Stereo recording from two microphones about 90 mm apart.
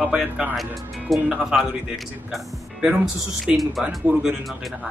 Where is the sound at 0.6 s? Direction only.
Centre (ahead or behind).